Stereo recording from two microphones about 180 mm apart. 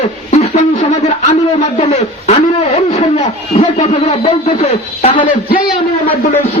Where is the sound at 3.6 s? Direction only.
35° left (ahead or behind).